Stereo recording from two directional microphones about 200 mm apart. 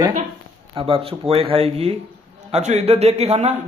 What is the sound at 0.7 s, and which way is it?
A man's voice, 25° right (ahead or behind).